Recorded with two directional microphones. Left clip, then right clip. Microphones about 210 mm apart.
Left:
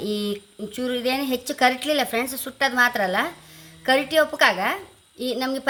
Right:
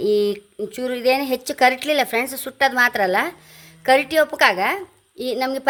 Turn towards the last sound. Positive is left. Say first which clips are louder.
# right 3 dB
turn(degrees=-40)  # may be behind; listen again after turning